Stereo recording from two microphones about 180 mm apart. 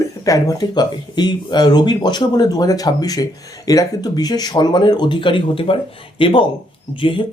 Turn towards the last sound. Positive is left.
turn(degrees=30)  # may be behind; listen again after turning